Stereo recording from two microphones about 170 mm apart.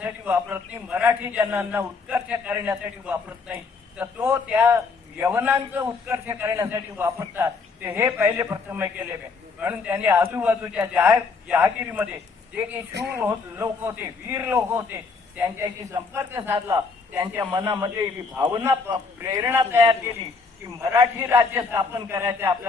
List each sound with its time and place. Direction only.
0.0 s a man's voice: 10° right (ahead or behind)
12.9 s speech: 80° right
13.1 s a man's voice: 10° right (ahead or behind)